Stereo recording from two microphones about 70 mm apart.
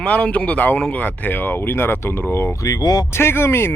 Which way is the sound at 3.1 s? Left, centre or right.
Left.